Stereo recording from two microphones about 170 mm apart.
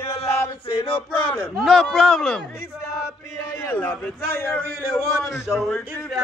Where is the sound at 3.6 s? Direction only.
10° left (ahead or behind).